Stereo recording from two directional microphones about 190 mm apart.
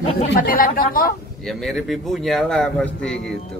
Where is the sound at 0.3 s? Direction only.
50° left (ahead or behind).